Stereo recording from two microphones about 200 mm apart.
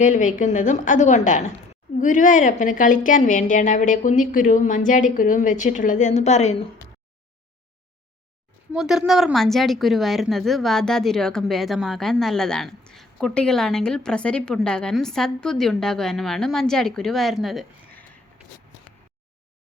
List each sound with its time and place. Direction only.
0.0 s a woman's voice: 40° left (ahead or behind)
8.7 s a woman's voice: 5° right (ahead or behind)